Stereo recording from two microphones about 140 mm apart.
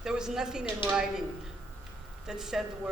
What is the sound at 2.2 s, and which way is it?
Speech, 5° right (ahead or behind).